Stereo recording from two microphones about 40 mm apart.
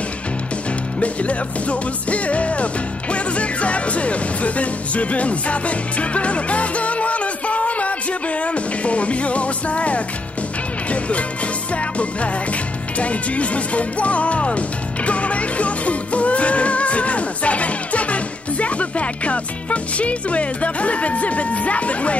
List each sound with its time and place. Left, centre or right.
0.9 s music: left